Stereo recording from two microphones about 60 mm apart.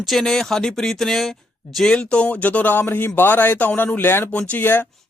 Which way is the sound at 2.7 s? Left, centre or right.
Left.